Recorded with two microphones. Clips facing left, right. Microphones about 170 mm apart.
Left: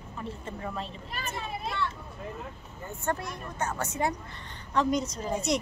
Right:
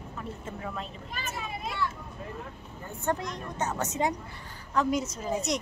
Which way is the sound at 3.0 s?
15° right (ahead or behind).